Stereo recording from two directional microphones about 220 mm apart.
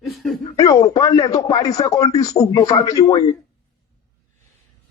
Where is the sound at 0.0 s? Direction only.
Centre (ahead or behind).